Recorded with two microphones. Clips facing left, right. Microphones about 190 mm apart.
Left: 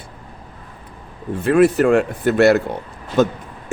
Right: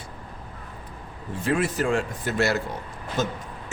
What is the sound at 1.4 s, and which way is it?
A man's voice, 60° left (ahead or behind).